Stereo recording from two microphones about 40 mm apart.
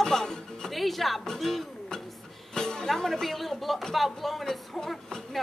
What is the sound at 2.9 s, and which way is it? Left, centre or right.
A man's voice, centre.